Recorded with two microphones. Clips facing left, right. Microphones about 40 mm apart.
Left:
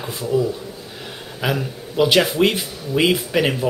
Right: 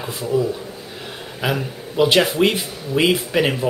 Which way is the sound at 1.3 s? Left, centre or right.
Centre.